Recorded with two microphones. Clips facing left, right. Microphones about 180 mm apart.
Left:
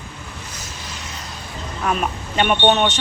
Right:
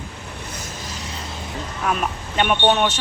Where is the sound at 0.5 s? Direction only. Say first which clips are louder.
Right 2 dB; 55° right (ahead or behind).